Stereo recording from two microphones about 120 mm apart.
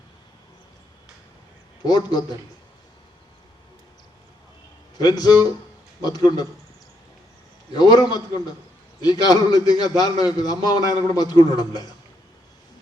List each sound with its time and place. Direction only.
1.8 s a man's voice: 35° left (ahead or behind)
4.9 s a man's voice: 35° left (ahead or behind)
7.8 s a man's voice: 35° left (ahead or behind)